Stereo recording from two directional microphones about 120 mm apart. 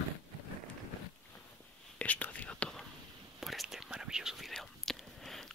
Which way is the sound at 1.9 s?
10° left (ahead or behind).